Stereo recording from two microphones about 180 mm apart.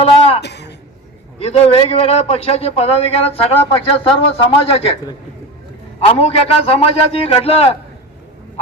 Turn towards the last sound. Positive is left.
turn(degrees=35)  # may be behind; listen again after turning